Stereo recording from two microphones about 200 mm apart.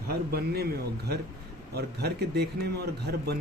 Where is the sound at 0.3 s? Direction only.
50° right (ahead or behind).